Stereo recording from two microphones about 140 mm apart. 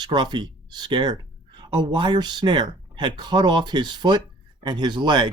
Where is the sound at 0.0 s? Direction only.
30° right (ahead or behind).